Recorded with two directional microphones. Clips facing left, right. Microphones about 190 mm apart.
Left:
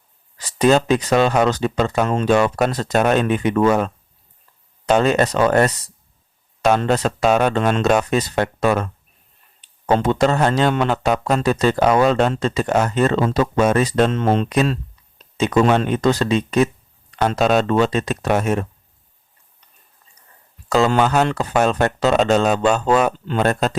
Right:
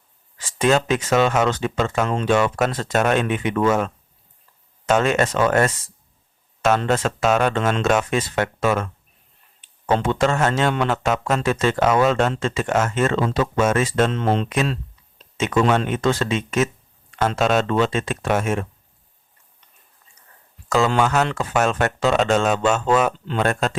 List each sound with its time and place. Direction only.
0.3 s a man's voice: 35° left (ahead or behind)
20.7 s a man's voice: 35° left (ahead or behind)